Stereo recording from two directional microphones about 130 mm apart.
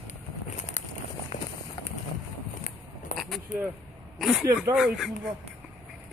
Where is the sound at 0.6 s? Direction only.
65° left (ahead or behind).